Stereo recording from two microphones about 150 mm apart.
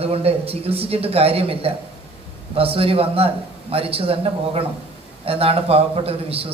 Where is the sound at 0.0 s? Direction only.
40° right (ahead or behind).